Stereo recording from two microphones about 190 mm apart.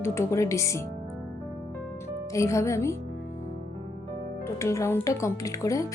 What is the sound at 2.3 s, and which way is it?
Speech, 15° left (ahead or behind).